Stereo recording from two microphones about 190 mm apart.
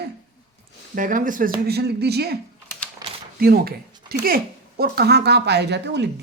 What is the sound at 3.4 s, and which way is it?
Speech, 55° right (ahead or behind).